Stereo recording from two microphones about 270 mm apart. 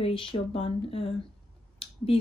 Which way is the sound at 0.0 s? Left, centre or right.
Centre.